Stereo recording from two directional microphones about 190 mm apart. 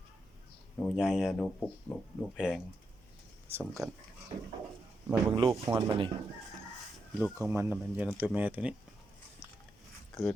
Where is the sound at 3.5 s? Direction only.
5° right (ahead or behind).